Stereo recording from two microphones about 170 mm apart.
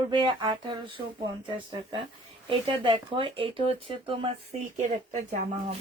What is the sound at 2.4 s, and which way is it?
Speech, 30° right (ahead or behind).